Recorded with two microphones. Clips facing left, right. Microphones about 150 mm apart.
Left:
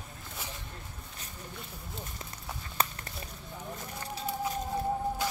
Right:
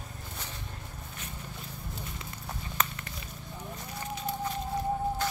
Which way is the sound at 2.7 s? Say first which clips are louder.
Left 1 dB; 40° left (ahead or behind).